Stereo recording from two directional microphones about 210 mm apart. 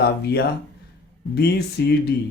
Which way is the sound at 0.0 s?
50° left (ahead or behind).